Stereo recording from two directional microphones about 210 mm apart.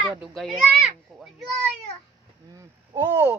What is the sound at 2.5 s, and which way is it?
Speech, 10° right (ahead or behind).